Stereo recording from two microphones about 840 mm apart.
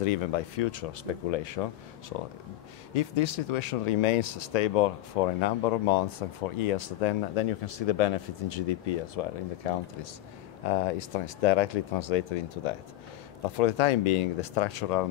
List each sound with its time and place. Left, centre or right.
0.0 s speech: left